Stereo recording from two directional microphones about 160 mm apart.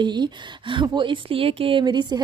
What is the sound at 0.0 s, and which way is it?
A woman's voice, 30° right (ahead or behind).